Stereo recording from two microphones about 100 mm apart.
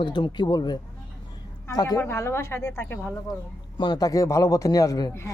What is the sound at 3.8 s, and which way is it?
A man's voice, 40° left (ahead or behind).